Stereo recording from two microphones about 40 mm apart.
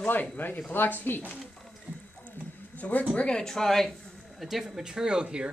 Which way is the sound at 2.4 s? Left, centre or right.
Left.